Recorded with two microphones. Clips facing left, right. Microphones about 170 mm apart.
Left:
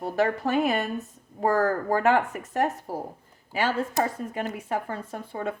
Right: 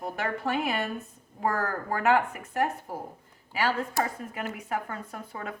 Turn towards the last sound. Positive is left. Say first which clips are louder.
# left 6 dB
turn(degrees=30)  # may be behind; listen again after turning